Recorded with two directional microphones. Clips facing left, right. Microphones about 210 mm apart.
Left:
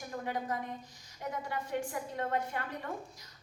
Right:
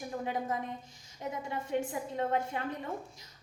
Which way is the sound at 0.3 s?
25° right (ahead or behind).